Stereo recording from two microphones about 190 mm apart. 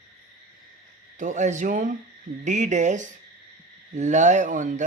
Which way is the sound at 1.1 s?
40° right (ahead or behind).